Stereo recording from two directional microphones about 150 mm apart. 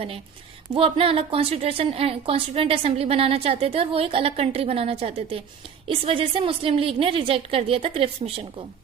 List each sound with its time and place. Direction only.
0.7 s a woman's voice: 40° right (ahead or behind)